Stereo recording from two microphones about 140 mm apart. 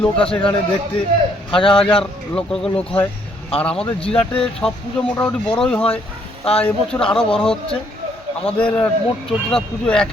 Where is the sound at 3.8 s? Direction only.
40° left (ahead or behind).